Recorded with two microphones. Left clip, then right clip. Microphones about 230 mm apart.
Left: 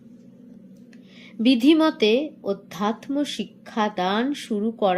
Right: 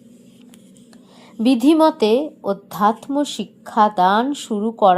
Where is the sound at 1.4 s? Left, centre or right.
Centre.